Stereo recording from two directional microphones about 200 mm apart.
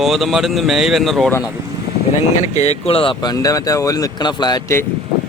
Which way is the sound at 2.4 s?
35° left (ahead or behind).